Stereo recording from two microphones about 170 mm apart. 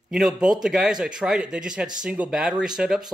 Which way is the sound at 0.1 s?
Centre (ahead or behind).